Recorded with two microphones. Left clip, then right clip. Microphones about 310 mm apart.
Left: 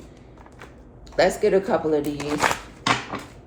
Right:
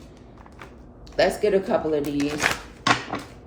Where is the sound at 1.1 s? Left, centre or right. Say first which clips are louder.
Left 1 dB; left.